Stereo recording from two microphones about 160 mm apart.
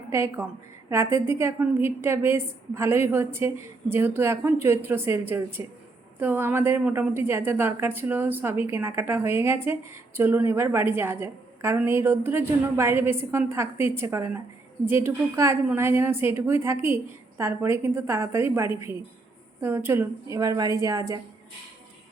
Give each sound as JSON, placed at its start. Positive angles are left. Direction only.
{"t": 0.1, "sound": "a woman's voice", "side_deg": -15}